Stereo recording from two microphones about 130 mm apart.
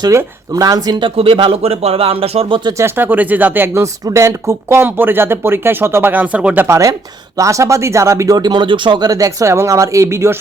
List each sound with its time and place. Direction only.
0.0 s speech: 25° right (ahead or behind); by 2.6 s 50° right (ahead or behind)
2.6 s speech: 20° right (ahead or behind)